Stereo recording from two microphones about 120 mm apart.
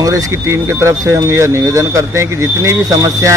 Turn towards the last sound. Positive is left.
turn(degrees=-30)  # may be behind; listen again after turning